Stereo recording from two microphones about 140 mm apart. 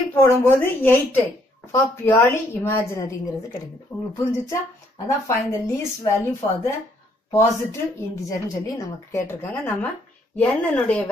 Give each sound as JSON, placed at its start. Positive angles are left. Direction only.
{"t": 0.1, "sound": "a woman's voice", "side_deg": 15}
{"t": 4.2, "sound": "a woman's voice", "side_deg": 20}
{"t": 9.3, "sound": "a woman's voice", "side_deg": 15}